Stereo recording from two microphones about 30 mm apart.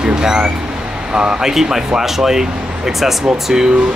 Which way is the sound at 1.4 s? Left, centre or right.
Centre.